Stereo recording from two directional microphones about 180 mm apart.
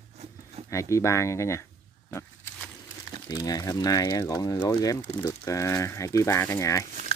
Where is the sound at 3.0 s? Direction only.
20° left (ahead or behind).